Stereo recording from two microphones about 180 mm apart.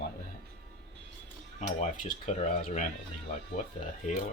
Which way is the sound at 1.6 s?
40° left (ahead or behind).